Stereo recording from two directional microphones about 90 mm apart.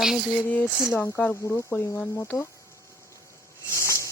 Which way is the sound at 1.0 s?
15° left (ahead or behind).